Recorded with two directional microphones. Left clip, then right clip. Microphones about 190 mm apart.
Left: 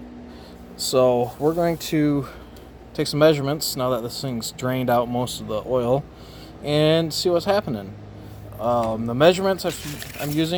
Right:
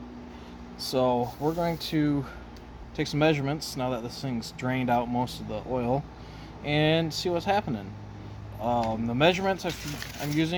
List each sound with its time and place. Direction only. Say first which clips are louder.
0.8 s speech: left 7 dB; 40° left (ahead or behind)